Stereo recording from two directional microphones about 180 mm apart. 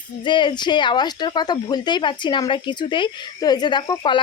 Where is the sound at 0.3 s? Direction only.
25° left (ahead or behind).